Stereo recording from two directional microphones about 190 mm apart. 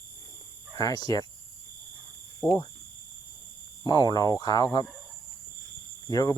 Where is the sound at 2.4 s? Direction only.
15° left (ahead or behind).